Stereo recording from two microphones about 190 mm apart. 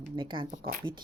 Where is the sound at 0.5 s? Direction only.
45° right (ahead or behind).